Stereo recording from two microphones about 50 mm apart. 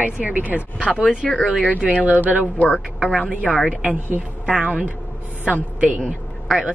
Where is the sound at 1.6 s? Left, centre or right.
Left.